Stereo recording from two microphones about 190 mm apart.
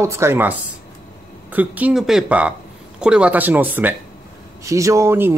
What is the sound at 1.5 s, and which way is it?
Speech, 10° right (ahead or behind).